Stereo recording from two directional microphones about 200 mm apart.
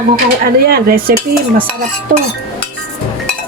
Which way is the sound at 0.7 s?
50° right (ahead or behind).